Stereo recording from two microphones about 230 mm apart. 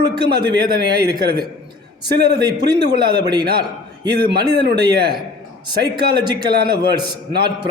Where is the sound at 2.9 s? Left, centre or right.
Centre.